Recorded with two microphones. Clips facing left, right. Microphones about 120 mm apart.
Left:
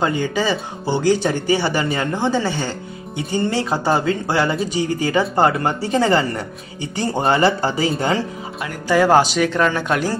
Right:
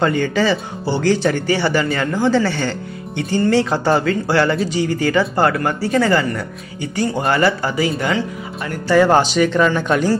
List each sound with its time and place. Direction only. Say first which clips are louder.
0.0 s speech: right 3 dB; 10° left (ahead or behind); by 7.9 s 30° left (ahead or behind)
8.8 s speech: right 1 dB; 10° left (ahead or behind)